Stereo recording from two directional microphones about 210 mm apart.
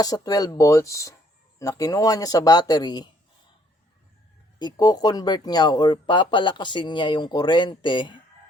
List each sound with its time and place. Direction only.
0.0 s speech: 15° left (ahead or behind)
4.6 s speech: 20° left (ahead or behind)